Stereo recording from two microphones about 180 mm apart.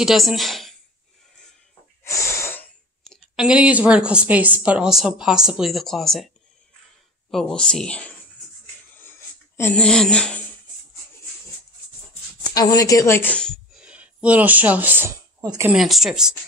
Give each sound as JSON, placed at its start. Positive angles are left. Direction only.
{"t": 0.0, "sound": "a woman's voice", "side_deg": 0}
{"t": 2.0, "sound": "snort", "side_deg": 15}
{"t": 3.0, "sound": "a woman's voice", "side_deg": 0}
{"t": 7.2, "sound": "a woman's voice", "side_deg": 0}
{"t": 9.6, "sound": "a woman's voice", "side_deg": 10}
{"t": 12.5, "sound": "speech", "side_deg": 20}
{"t": 15.7, "sound": "a woman's voice", "side_deg": 0}